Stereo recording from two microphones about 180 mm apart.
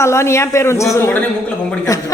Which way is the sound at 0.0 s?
15° left (ahead or behind).